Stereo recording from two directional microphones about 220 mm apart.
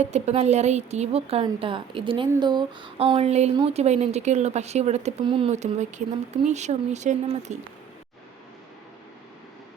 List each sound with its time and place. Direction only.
0.0 s speech: 30° right (ahead or behind)